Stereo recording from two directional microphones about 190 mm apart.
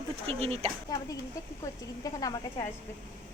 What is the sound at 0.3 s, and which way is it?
Speech, 30° right (ahead or behind).